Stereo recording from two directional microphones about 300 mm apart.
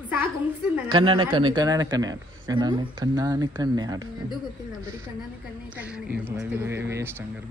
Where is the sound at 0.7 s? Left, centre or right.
Centre.